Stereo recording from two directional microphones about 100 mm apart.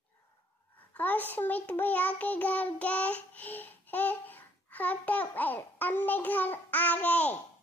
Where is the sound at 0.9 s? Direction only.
15° left (ahead or behind).